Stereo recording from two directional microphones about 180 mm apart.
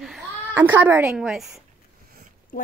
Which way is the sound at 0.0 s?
Centre (ahead or behind).